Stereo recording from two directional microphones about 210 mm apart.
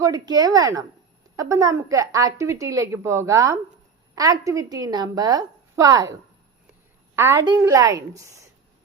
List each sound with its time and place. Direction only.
0.0 s a woman's voice: 20° right (ahead or behind)
7.2 s a woman's voice: 10° right (ahead or behind)